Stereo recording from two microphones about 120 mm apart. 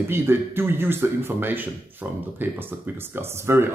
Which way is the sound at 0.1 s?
20° right (ahead or behind).